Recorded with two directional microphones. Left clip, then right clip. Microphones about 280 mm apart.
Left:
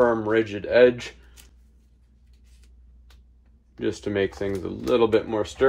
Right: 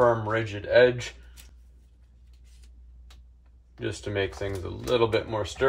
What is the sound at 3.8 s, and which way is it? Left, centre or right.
Speech, centre.